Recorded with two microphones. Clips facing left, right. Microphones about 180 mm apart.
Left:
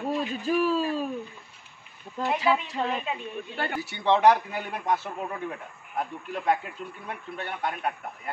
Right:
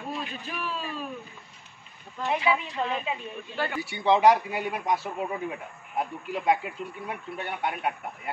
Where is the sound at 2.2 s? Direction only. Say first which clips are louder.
Left 1 dB; centre (ahead or behind).